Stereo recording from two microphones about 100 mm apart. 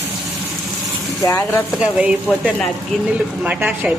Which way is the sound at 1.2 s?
30° left (ahead or behind).